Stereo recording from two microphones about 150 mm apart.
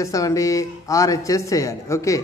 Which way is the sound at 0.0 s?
20° left (ahead or behind).